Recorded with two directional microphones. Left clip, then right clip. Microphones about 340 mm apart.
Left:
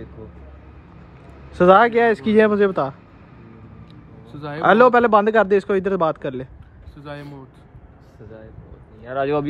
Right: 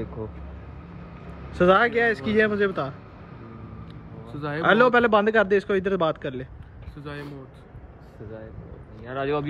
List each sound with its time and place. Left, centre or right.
1.6 s speech: centre
4.3 s speech: centre
9.1 s speech: centre